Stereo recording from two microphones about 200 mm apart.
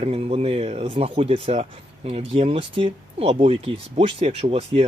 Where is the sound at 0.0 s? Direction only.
30° right (ahead or behind).